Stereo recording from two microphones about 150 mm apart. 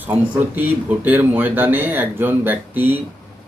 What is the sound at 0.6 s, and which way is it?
Speech, 10° right (ahead or behind).